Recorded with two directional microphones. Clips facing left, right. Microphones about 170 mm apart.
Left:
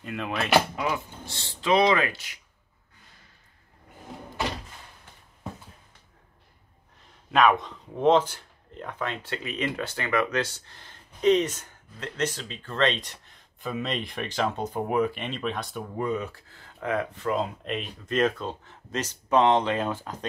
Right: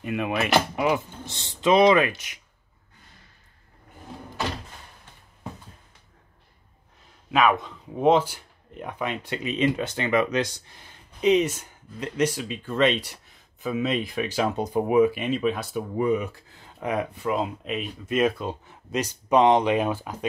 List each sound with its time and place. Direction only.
0.0 s speech: 15° right (ahead or behind)
7.2 s speech: centre (ahead or behind)